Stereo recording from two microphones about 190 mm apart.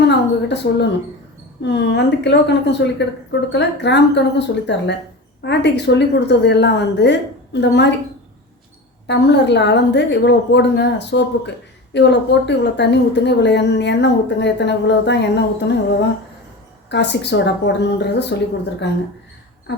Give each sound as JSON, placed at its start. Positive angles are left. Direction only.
{"t": 0.1, "sound": "a sound", "side_deg": 65}
{"t": 1.6, "sound": "a woman's voice", "side_deg": 65}
{"t": 9.0, "sound": "a woman's voice", "side_deg": 65}